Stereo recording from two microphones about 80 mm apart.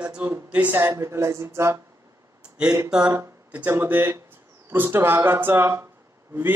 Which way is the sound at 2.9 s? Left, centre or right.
Centre.